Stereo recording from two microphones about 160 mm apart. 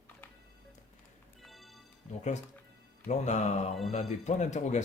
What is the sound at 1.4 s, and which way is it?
Music, centre (ahead or behind).